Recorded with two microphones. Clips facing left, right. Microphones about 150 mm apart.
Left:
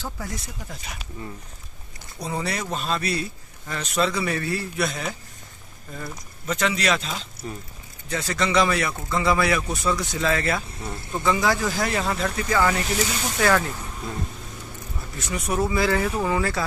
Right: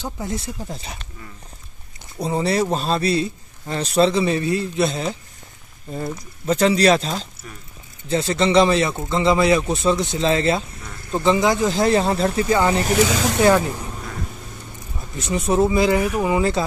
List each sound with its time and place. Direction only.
0.0 s speech: 25° right (ahead or behind)
2.1 s speech: 25° right (ahead or behind)
10.7 s speech: 30° left (ahead or behind)
11.1 s speech: 25° right (ahead or behind)
13.0 s speech: 90° right
13.4 s speech: 20° right (ahead or behind)
15.1 s speech: 25° right (ahead or behind)